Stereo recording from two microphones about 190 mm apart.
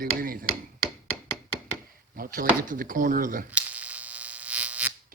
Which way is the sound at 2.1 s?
50° right (ahead or behind).